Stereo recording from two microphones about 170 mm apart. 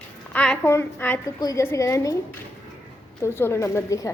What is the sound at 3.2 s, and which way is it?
Speech, 15° left (ahead or behind).